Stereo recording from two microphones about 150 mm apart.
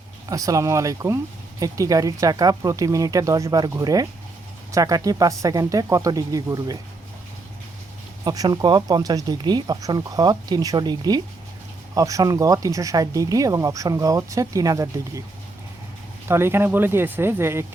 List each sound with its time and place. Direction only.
0.3 s speech: 25° right (ahead or behind)
8.2 s speech: 25° right (ahead or behind)
16.3 s speech: 15° right (ahead or behind)